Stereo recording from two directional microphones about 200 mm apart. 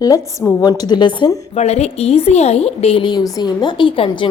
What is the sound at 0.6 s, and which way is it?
A woman's voice, 20° left (ahead or behind).